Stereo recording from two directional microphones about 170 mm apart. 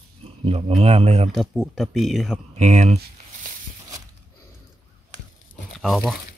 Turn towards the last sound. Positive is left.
turn(degrees=5)  # may be behind; listen again after turning